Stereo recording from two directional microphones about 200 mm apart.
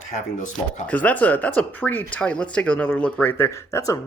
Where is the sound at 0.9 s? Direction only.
10° left (ahead or behind).